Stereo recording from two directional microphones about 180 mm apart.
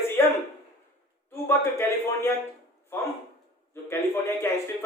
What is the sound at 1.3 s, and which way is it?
A man's voice, 15° left (ahead or behind).